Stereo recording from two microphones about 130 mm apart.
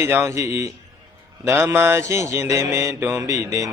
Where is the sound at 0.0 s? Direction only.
20° right (ahead or behind).